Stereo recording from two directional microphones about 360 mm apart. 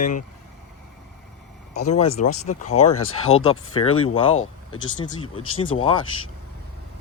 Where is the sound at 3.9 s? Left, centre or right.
Left.